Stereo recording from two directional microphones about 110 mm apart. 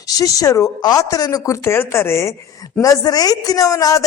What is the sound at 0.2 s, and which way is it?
Speech, 30° left (ahead or behind).